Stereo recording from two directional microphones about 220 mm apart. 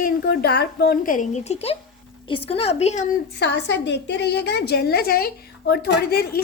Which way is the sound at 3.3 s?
50° left (ahead or behind).